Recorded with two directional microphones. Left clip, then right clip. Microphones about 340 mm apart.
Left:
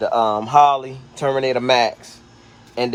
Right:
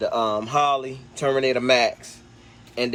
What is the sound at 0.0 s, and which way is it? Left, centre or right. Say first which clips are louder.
Speech: left 5 dB; left.